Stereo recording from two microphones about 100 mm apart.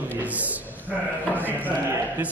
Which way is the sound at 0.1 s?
15° right (ahead or behind).